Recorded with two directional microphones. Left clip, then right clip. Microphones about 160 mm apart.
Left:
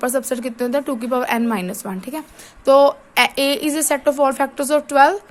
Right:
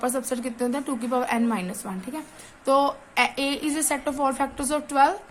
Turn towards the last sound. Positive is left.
turn(degrees=50)  # may be behind; listen again after turning